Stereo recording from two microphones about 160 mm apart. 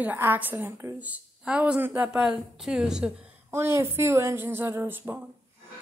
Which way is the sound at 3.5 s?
15° right (ahead or behind).